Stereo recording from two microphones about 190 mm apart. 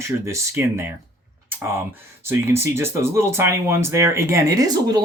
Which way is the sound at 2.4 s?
15° right (ahead or behind).